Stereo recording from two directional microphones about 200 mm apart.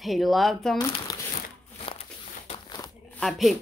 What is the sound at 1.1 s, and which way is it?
Crumpling, 20° left (ahead or behind).